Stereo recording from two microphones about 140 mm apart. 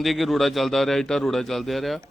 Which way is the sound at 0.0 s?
Centre (ahead or behind).